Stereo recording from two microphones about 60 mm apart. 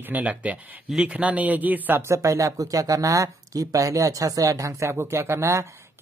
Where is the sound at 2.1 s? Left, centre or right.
Right.